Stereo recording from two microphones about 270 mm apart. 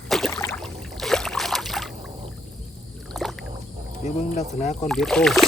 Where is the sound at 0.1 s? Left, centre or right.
Centre.